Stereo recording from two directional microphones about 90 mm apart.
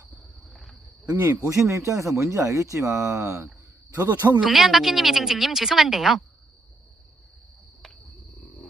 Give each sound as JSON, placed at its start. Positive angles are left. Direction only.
{"t": 0.5, "sound": "cricket", "side_deg": 0}
{"t": 1.5, "sound": "speech", "side_deg": -35}
{"t": 4.4, "sound": "speech", "side_deg": -5}